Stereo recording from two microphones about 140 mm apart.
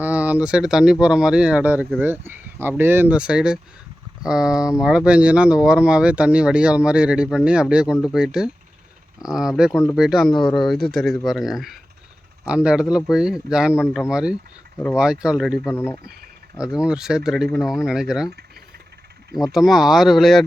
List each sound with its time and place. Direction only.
0.0 s speech: 10° right (ahead or behind)
10.3 s speech: 35° left (ahead or behind)
10.7 s speech: centre (ahead or behind)
15.7 s speech: 20° left (ahead or behind)
16.6 s speech: 5° right (ahead or behind)
19.3 s speech: centre (ahead or behind)